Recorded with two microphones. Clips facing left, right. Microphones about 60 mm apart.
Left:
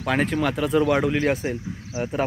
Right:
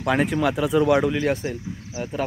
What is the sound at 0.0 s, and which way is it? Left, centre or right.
Speech, centre.